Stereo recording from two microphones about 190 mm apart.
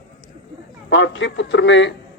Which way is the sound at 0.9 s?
75° left (ahead or behind).